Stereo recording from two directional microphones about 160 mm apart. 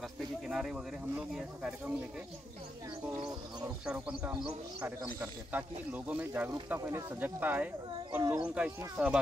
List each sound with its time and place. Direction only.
0.5 s speech: 5° right (ahead or behind)
3.6 s speech: 5° right (ahead or behind)
8.2 s speech: 20° right (ahead or behind)
8.5 s speech: 5° right (ahead or behind)